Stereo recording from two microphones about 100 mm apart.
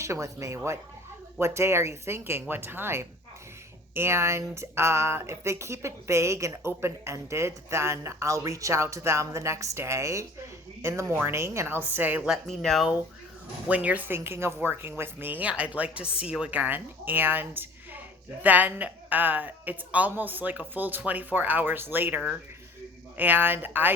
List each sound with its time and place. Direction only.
0.0 s speech: 30° right (ahead or behind)
12.3 s speech: 5° left (ahead or behind)
13.7 s a woman's voice: 15° right (ahead or behind)